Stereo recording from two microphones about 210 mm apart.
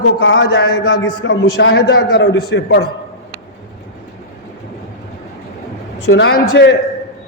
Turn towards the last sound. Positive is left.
turn(degrees=55)  # may be behind; listen again after turning